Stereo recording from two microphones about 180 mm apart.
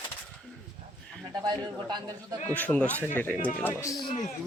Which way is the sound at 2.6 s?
5° left (ahead or behind).